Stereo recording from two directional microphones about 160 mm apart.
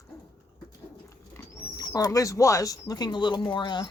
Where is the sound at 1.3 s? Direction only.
20° left (ahead or behind).